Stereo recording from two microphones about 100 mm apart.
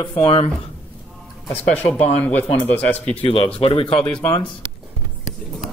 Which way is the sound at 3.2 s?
70° left (ahead or behind).